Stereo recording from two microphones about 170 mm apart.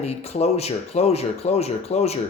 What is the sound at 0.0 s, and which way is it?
Speech, 40° left (ahead or behind).